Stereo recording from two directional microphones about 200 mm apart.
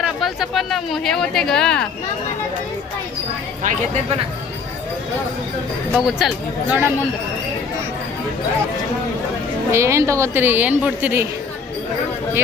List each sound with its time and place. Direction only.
0.0 s speech: centre (ahead or behind)
3.6 s speech: 40° right (ahead or behind)
5.9 s speech: centre (ahead or behind)
9.7 s a woman's voice: 15° right (ahead or behind)